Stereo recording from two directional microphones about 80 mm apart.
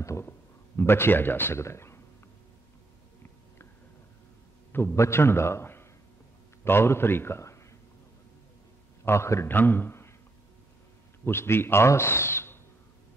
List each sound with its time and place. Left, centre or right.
0.0 s a sound: left
0.7 s speech: left
4.9 s a man's voice: left
9.0 s a man's voice: left
11.2 s speech: left